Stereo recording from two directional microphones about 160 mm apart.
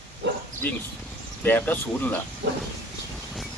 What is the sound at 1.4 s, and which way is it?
Speech, 10° left (ahead or behind).